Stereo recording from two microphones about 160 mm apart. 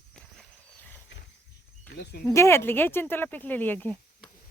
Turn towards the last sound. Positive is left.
turn(degrees=10)  # may be behind; listen again after turning